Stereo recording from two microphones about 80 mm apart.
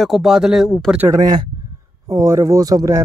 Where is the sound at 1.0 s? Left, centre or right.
Right.